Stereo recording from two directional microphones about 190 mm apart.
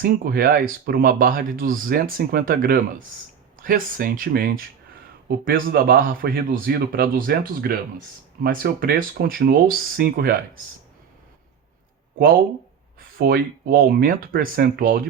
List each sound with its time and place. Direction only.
0.0 s speech: 50° right (ahead or behind)
13.1 s speech: 50° right (ahead or behind)